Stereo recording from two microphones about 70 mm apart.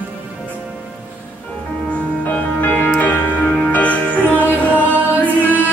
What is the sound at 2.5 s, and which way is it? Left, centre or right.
Music, left.